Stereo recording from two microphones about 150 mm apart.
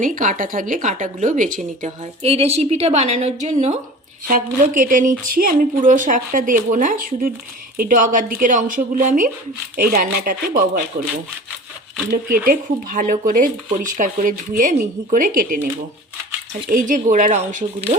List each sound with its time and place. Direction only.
0.0 s speech: 60° right (ahead or behind)
2.2 s a woman's voice: 40° right (ahead or behind)
4.3 s speech: 65° right (ahead or behind)
9.7 s speech: 80° right
12.1 s speech: 65° right (ahead or behind)
16.6 s speech: 60° right (ahead or behind)